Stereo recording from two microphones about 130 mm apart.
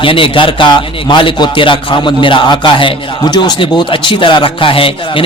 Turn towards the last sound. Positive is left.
turn(degrees=45)  # may be behind; listen again after turning